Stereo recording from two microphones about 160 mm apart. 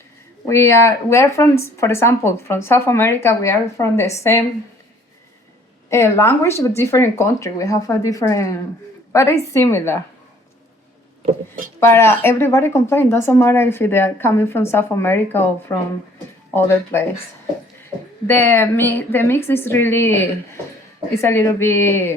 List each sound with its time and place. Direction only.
0.4 s speech: 15° left (ahead or behind)
5.9 s speech: 15° left (ahead or behind)
11.8 s speech: 15° left (ahead or behind)
16.6 s speech: 15° left (ahead or behind)
18.3 s speech: 15° left (ahead or behind)